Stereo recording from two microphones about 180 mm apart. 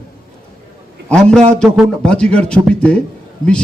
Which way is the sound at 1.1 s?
5° left (ahead or behind).